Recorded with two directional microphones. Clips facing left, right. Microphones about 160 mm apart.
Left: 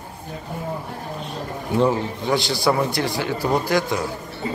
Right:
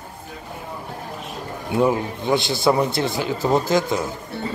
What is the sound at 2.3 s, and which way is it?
A man's voice, 20° right (ahead or behind).